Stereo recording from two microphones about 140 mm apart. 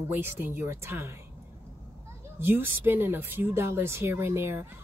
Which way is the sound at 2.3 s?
15° right (ahead or behind).